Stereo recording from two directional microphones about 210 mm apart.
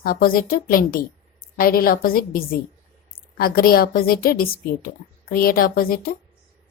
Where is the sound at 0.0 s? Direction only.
45° left (ahead or behind).